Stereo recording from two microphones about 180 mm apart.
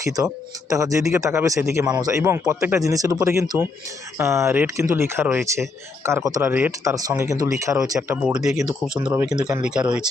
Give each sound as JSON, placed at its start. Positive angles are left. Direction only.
{"t": 0.7, "sound": "a man's voice", "side_deg": -20}